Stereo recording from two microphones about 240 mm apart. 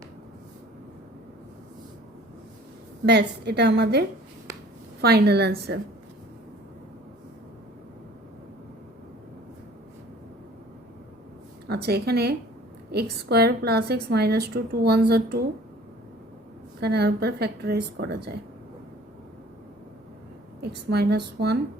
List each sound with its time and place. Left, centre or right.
3.1 s a woman's voice: right
11.7 s a woman's voice: right
16.8 s a woman's voice: right
20.6 s a woman's voice: right